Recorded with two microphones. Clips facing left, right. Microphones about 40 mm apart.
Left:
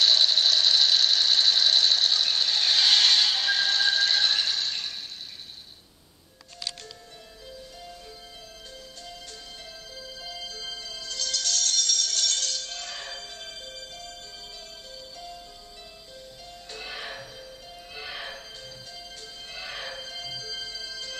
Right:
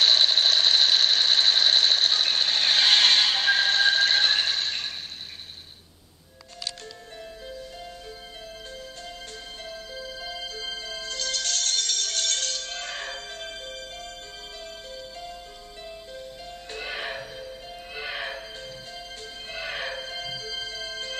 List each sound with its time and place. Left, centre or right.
0.0 s alarm clock: right
9.7 s music: right
16.7 s music: right
19.5 s music: right